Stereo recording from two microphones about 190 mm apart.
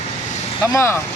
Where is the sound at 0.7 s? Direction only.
15° left (ahead or behind).